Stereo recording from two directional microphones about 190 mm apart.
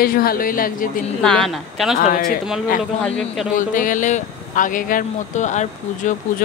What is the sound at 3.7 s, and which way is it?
Speech, 45° left (ahead or behind).